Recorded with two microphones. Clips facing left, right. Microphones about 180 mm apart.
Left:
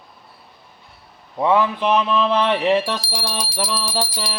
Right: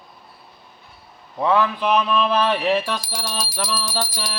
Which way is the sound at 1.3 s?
20° left (ahead or behind).